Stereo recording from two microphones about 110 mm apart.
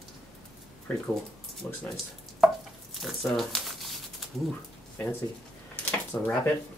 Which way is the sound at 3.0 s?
Centre (ahead or behind).